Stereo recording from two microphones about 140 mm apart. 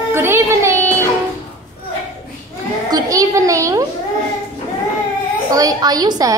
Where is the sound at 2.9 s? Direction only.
25° right (ahead or behind).